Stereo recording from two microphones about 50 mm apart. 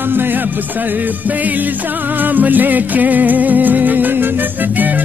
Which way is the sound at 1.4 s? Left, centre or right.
Right.